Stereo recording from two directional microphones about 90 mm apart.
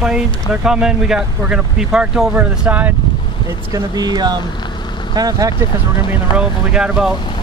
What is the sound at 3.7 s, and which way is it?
Speech, 45° right (ahead or behind).